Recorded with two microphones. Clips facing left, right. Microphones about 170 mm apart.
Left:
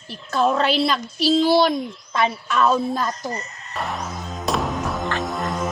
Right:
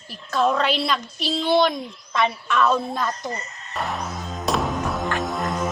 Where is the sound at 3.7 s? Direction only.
Centre (ahead or behind).